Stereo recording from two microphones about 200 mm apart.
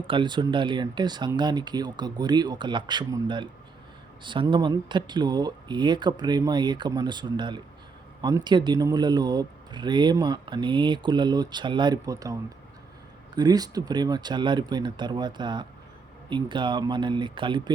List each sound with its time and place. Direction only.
0.1 s speech: 25° right (ahead or behind)